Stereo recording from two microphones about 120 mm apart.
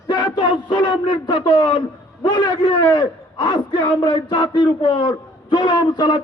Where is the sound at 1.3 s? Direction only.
45° left (ahead or behind).